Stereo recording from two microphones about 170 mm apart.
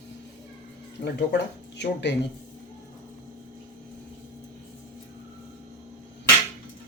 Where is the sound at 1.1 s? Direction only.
90° left.